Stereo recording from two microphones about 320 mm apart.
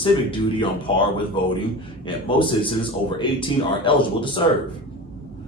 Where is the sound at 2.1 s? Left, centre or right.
Centre.